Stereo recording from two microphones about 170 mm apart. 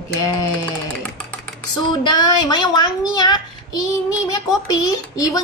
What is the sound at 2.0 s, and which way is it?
A woman's voice, 25° left (ahead or behind).